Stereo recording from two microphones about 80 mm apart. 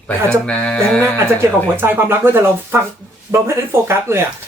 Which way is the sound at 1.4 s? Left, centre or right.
Right.